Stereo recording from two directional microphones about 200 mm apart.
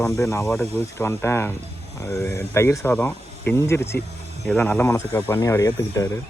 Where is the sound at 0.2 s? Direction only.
15° left (ahead or behind).